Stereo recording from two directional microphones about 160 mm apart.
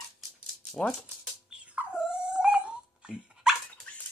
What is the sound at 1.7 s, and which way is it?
Dog, 5° right (ahead or behind).